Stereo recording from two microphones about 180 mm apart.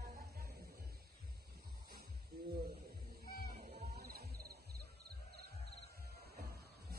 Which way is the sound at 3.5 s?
60° right (ahead or behind).